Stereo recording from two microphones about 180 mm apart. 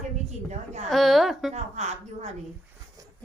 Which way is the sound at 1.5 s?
40° right (ahead or behind).